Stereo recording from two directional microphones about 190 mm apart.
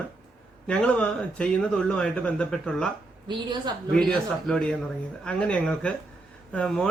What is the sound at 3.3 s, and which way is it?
Speech, 25° right (ahead or behind).